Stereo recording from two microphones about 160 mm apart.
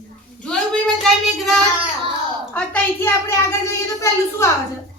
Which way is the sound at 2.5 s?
15° left (ahead or behind).